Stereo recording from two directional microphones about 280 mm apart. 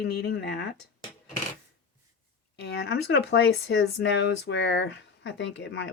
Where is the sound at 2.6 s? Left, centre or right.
Left.